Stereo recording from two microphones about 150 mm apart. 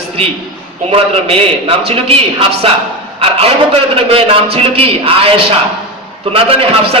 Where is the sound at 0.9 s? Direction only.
40° right (ahead or behind).